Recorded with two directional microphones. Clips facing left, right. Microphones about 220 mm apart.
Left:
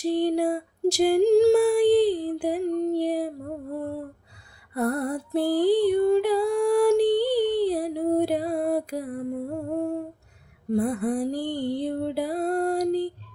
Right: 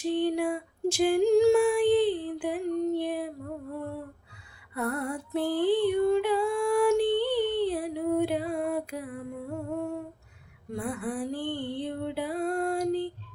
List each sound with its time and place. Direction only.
0.0 s female singing: 40° left (ahead or behind)
4.7 s music: 40° left (ahead or behind)